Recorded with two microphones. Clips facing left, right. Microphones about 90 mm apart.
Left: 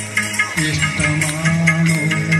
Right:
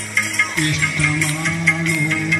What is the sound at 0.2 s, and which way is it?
Music, 10° left (ahead or behind).